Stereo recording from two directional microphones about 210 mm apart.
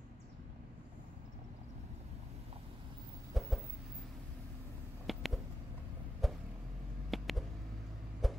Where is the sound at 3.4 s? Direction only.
Centre (ahead or behind).